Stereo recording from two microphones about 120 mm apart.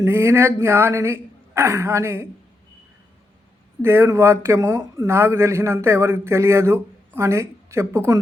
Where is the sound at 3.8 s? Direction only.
20° right (ahead or behind).